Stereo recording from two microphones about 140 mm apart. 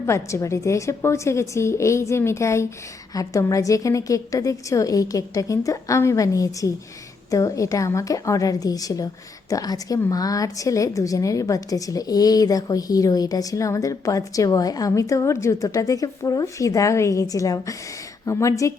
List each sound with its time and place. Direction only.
0.0 s a woman's voice: 20° left (ahead or behind)